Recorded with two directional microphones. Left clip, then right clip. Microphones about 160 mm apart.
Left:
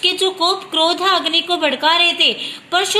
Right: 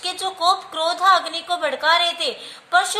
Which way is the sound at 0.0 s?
30° left (ahead or behind).